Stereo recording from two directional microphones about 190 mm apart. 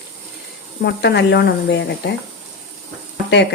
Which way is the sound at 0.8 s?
60° left (ahead or behind).